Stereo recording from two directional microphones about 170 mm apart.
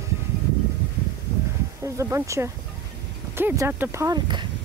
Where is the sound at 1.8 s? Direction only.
15° right (ahead or behind).